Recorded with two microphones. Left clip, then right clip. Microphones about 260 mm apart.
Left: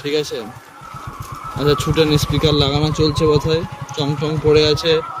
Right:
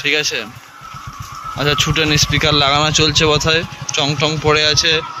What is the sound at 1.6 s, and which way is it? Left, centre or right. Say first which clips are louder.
A man's voice: even; centre.